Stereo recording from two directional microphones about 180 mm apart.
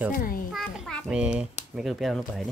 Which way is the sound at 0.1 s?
50° left (ahead or behind).